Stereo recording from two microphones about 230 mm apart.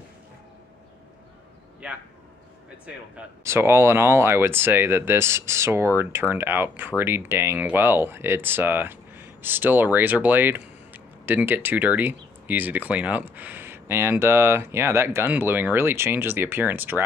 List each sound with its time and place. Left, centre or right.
1.8 s speech: centre
3.2 s speech: centre